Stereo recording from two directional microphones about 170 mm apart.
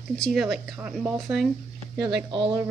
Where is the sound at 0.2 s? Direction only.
Centre (ahead or behind).